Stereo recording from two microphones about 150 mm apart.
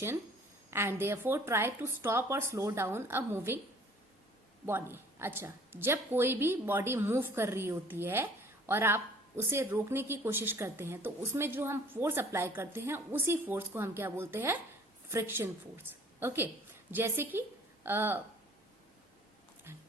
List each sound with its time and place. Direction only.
0.7 s a woman's voice: 15° right (ahead or behind)
4.6 s a woman's voice: 15° right (ahead or behind)